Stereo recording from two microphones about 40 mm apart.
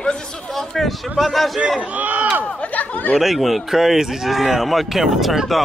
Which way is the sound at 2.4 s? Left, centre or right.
Left.